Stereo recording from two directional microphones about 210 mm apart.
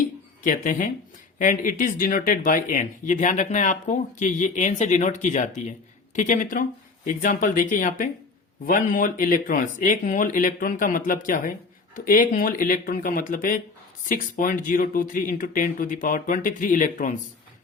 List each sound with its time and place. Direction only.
0.4 s speech: 40° left (ahead or behind)